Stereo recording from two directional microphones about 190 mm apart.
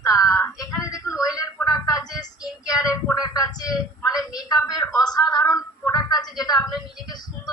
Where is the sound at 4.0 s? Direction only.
20° left (ahead or behind).